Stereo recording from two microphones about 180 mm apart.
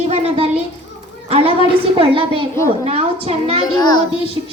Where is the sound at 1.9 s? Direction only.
30° right (ahead or behind).